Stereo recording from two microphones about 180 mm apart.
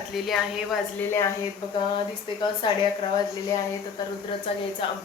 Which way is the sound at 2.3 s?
25° left (ahead or behind).